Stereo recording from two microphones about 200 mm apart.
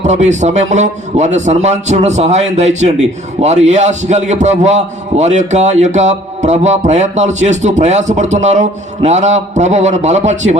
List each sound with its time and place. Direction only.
0.0 s a man's voice: 35° right (ahead or behind)